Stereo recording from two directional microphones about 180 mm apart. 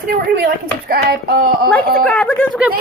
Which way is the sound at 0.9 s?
60° right (ahead or behind).